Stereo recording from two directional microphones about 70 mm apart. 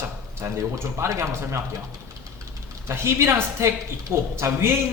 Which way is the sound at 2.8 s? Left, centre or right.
Right.